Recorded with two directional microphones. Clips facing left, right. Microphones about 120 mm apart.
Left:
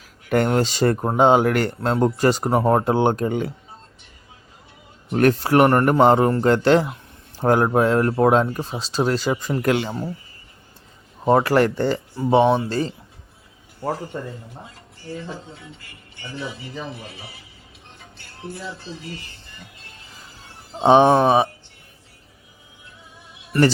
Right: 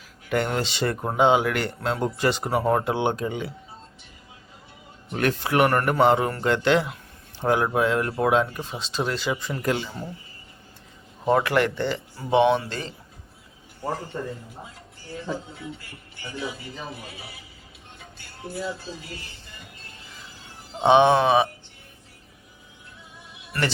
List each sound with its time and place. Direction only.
0.3 s speech: 45° left (ahead or behind)
5.1 s speech: 40° left (ahead or behind)
9.6 s speech: 80° left
11.3 s speech: 35° left (ahead or behind)
16.5 s speech: centre (ahead or behind)
20.7 s speech: 35° left (ahead or behind)